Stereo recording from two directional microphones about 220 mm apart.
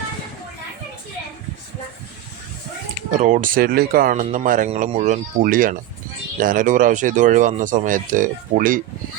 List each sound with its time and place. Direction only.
3.1 s speech: 35° right (ahead or behind)